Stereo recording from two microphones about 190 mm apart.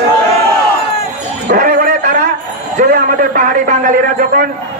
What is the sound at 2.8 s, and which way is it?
Speech, 45° right (ahead or behind).